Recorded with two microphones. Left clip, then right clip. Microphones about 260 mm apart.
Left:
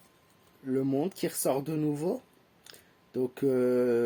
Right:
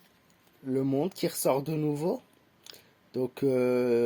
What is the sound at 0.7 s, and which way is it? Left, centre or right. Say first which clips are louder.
Speech: right 1 dB; right.